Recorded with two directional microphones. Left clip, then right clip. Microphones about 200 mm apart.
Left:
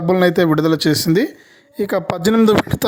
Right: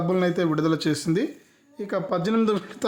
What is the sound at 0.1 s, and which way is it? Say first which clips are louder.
Speech: left 11 dB; 40° left (ahead or behind).